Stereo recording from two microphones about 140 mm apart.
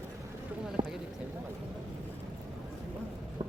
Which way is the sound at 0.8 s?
35° right (ahead or behind).